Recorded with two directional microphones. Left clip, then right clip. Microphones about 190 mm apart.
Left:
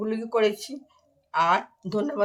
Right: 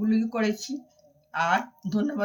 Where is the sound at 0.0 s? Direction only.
50° left (ahead or behind).